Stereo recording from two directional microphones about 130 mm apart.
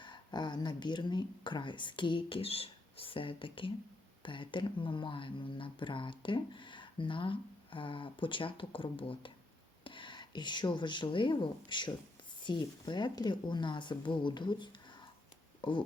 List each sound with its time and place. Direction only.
0.0 s speech: 35° left (ahead or behind)